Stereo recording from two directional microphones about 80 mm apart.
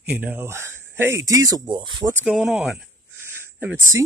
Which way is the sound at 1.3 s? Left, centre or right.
Right.